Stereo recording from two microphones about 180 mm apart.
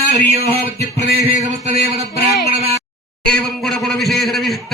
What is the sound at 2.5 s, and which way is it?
Speech, 35° right (ahead or behind).